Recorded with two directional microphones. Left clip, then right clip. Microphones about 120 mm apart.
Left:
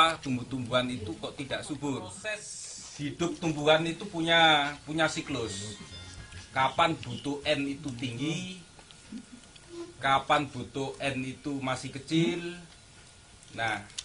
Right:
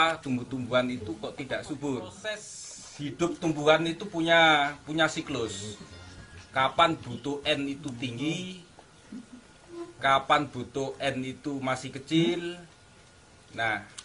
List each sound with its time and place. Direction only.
0.0 s speech: centre (ahead or behind)
3.5 s speech: 5° right (ahead or behind)
9.9 s speech: 5° right (ahead or behind)
13.6 s speech: 5° right (ahead or behind)